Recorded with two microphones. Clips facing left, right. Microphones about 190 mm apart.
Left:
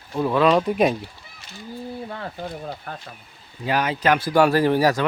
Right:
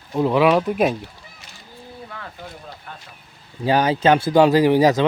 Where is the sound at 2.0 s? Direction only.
35° left (ahead or behind).